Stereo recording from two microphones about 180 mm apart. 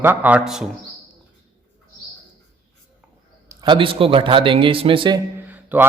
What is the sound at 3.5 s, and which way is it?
Speech, 25° right (ahead or behind).